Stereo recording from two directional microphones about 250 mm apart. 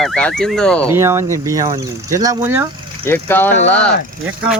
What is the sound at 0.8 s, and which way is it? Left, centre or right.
Speech, centre.